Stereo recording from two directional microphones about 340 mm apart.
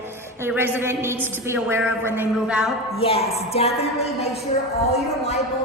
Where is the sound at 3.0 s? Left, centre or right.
Centre.